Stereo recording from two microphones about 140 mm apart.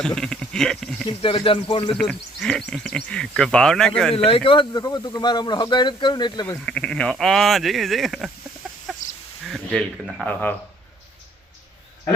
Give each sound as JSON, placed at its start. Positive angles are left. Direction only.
{"t": 0.0, "sound": "speech", "side_deg": 5}
{"t": 1.0, "sound": "speech", "side_deg": 40}
{"t": 2.0, "sound": "speech", "side_deg": 5}
{"t": 4.3, "sound": "speech", "side_deg": 35}
{"t": 6.7, "sound": "speech", "side_deg": 5}
{"t": 8.7, "sound": "chicken", "side_deg": 0}
{"t": 9.4, "sound": "speech", "side_deg": 0}